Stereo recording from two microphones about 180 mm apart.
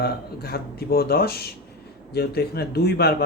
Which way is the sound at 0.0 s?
60° left (ahead or behind).